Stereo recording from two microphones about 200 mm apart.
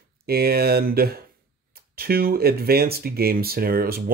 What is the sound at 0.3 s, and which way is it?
Speech, 50° right (ahead or behind).